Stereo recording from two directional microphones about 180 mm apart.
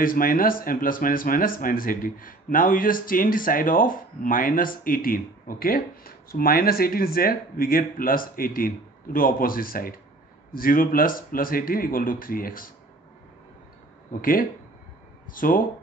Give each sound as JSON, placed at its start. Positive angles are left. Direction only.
{"t": 0.0, "sound": "speech", "side_deg": 50}
{"t": 14.2, "sound": "speech", "side_deg": 50}